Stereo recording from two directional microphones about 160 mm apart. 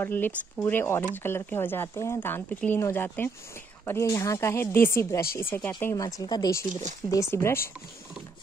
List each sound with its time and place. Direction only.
0.0 s speech: 10° left (ahead or behind)